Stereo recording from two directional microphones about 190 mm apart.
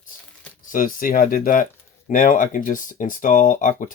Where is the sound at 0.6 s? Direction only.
45° left (ahead or behind).